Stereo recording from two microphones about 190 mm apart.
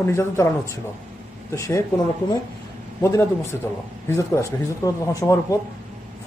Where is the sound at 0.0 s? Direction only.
15° left (ahead or behind).